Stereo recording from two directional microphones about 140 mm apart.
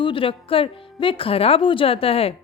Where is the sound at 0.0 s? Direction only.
40° left (ahead or behind).